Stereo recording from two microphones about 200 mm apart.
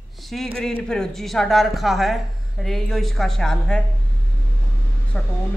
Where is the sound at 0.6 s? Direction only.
5° left (ahead or behind).